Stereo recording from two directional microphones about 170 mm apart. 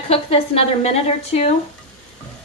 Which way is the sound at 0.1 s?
35° left (ahead or behind).